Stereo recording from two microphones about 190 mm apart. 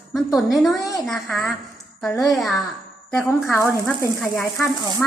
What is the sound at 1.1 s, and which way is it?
A woman's voice, 5° left (ahead or behind).